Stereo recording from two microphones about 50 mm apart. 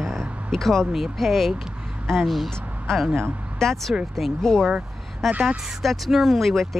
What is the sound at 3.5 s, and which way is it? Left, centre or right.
A woman's voice, centre.